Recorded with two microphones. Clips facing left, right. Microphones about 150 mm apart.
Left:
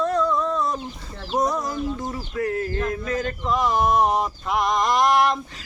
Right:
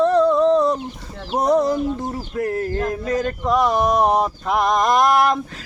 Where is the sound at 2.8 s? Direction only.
35° right (ahead or behind).